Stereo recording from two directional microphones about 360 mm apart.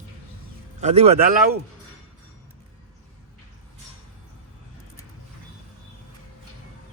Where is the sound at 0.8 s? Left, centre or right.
Centre.